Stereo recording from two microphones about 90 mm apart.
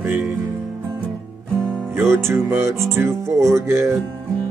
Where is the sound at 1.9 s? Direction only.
25° right (ahead or behind).